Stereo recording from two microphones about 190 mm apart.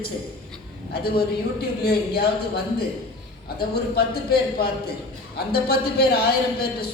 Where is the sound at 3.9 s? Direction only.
55° left (ahead or behind).